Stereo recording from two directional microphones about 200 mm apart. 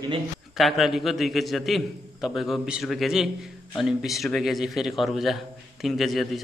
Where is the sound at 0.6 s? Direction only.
Centre (ahead or behind).